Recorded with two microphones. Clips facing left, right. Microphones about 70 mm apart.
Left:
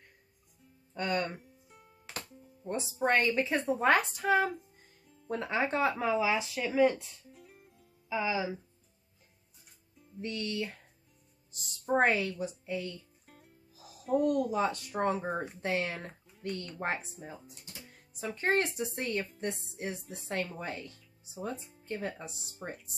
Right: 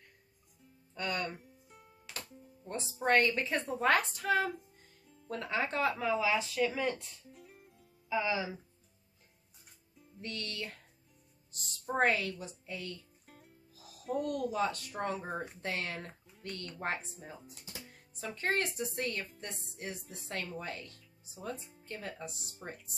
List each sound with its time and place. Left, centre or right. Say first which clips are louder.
0.9 s speech: left 4 dB; left
1.3 s music: left 2 dB; centre
2.7 s a woman's voice: left 1 dB; centre
5.0 s music: right 1 dB; centre
5.3 s speech: left 3 dB; centre
10.2 s a woman's voice: left 6 dB; centre
13.3 s music: even; centre
14.2 s speech: left 3 dB; centre
16.3 s a sound: left 7 dB; centre
17.0 s speech: left 3 dB; centre
18.4 s speech: left 4 dB; left
21.5 s speech: left 1 dB; centre
21.8 s speech: left 5 dB; left